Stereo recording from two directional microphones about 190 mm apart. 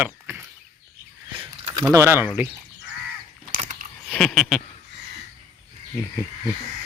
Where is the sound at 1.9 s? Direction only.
15° right (ahead or behind).